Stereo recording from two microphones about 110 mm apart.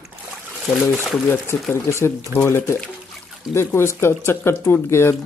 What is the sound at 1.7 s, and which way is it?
Speech, 25° left (ahead or behind).